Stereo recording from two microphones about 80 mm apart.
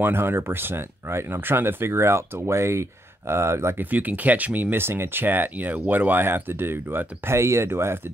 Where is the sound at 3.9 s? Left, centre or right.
Right.